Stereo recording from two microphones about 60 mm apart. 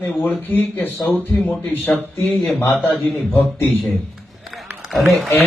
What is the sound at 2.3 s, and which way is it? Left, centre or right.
Speech, centre.